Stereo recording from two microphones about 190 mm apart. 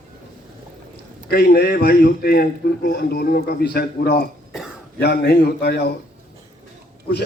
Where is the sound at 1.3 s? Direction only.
55° left (ahead or behind).